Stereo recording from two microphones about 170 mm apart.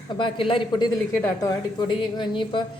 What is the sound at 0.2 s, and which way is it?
A woman's voice, 30° left (ahead or behind).